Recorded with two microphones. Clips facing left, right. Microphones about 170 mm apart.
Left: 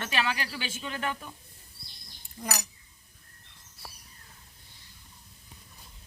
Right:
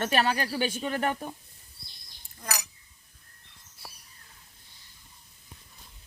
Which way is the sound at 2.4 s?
20° left (ahead or behind).